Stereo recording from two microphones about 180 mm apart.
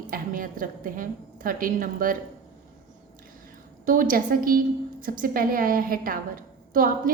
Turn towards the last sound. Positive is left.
turn(degrees=-50)  # may be behind; listen again after turning